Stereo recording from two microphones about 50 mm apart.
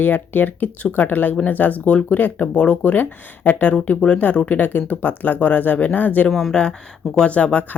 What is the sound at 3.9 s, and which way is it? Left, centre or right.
Speech, left.